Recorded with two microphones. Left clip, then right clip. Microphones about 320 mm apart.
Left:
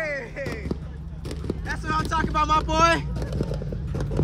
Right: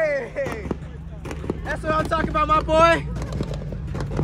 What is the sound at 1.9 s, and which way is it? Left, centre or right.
Speech, centre.